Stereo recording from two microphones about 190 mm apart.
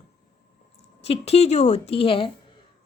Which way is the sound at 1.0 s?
35° left (ahead or behind).